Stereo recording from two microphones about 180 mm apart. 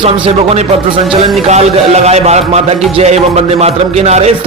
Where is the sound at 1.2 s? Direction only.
35° right (ahead or behind).